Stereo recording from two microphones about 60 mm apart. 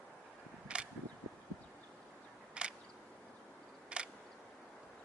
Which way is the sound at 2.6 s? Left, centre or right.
Centre.